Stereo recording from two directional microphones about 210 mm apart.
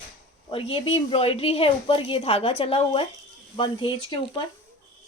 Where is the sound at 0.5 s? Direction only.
25° left (ahead or behind).